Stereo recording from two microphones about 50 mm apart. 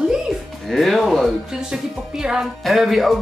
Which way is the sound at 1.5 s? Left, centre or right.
Centre.